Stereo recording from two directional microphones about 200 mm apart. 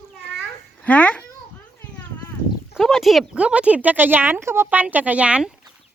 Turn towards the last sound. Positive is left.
turn(degrees=-5)  # may be behind; listen again after turning